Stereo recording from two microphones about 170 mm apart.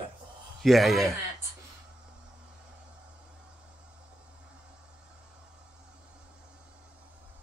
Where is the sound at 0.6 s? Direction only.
Centre (ahead or behind).